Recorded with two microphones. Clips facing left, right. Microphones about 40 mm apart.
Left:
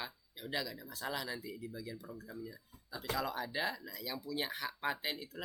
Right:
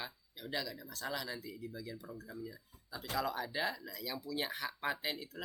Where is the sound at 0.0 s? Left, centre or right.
Centre.